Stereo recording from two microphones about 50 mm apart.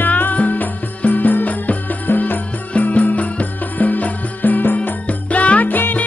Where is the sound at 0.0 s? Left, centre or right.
Left.